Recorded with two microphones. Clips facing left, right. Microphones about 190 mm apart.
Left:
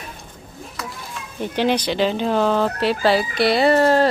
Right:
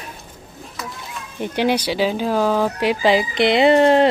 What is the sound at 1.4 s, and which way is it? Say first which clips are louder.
Fowl: right 1 dB; 10° right (ahead or behind).